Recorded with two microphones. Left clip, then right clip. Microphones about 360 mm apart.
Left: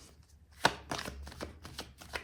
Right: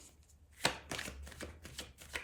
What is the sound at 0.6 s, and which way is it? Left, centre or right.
Chopping, centre.